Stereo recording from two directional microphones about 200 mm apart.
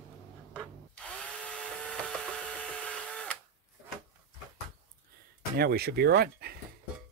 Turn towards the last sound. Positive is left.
turn(degrees=-50)  # may be behind; listen again after turning